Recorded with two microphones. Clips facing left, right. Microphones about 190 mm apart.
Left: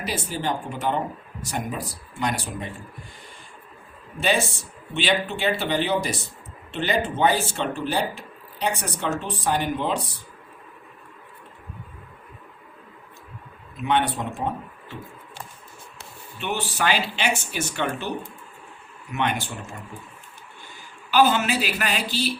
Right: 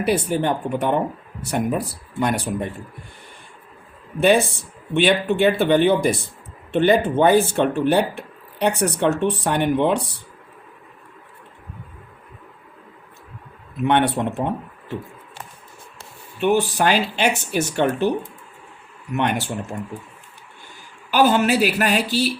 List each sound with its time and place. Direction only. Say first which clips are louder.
0.0 s speech: right 8 dB; 60° right (ahead or behind)
4.2 s speech: right 7 dB; 60° right (ahead or behind)
13.7 s speech: right 5 dB; 65° right (ahead or behind)
16.7 s speech: right 5 dB; 45° right (ahead or behind)
19.1 s speech: right 4 dB; 50° right (ahead or behind)
21.1 s speech: right 3 dB; 50° right (ahead or behind)